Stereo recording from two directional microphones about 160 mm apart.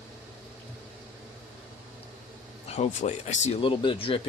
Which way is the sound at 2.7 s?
45° left (ahead or behind).